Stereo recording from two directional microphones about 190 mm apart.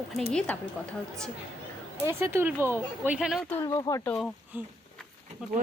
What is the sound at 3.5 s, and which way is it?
Speech, 20° left (ahead or behind).